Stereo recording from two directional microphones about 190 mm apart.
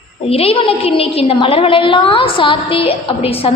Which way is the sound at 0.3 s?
30° left (ahead or behind).